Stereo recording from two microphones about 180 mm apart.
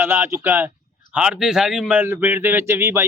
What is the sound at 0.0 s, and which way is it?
Speech, 10° right (ahead or behind).